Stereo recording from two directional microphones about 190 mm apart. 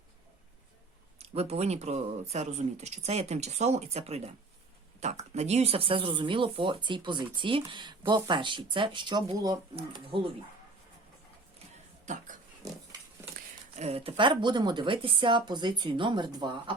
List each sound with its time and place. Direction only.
1.2 s speech: 35° right (ahead or behind)
12.0 s speech: 40° right (ahead or behind); by 16.7 s 25° right (ahead or behind)